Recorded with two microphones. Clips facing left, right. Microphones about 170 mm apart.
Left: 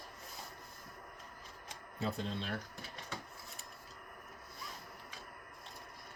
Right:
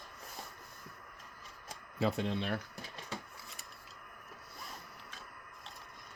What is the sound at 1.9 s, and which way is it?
Speech, 80° right.